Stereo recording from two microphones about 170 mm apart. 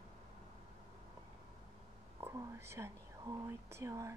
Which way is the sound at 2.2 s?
15° right (ahead or behind).